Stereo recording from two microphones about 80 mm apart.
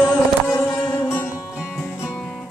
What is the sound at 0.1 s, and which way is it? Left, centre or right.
Music, left.